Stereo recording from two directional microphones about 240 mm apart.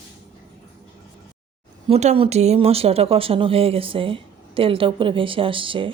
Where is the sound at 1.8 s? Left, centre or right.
Right.